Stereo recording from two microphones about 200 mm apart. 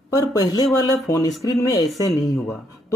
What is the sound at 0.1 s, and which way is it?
Speech, 15° left (ahead or behind).